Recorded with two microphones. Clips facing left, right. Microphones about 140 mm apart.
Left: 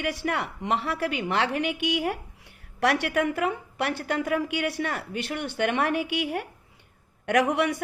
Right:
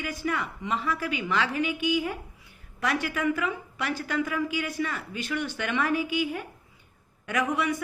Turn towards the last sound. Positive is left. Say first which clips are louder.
# left 4 dB
turn(degrees=70)  # may be behind; listen again after turning